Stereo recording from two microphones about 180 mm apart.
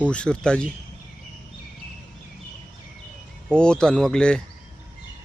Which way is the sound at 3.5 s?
5° left (ahead or behind).